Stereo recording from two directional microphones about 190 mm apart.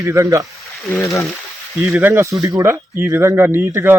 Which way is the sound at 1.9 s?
10° right (ahead or behind).